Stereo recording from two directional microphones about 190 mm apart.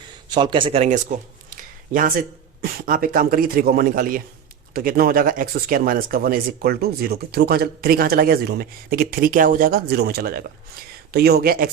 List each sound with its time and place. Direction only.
0.3 s speech: 25° right (ahead or behind); by 11.7 s 55° right (ahead or behind)